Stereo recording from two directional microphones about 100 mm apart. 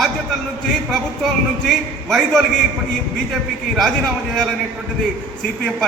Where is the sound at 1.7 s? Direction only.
5° left (ahead or behind).